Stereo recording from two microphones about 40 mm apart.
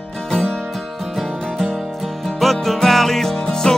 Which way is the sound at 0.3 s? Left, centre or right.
Centre.